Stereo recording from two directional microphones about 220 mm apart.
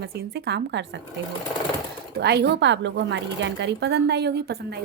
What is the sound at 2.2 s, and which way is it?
Speech, 50° right (ahead or behind).